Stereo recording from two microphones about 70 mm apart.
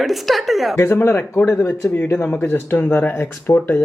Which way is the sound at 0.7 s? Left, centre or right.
Left.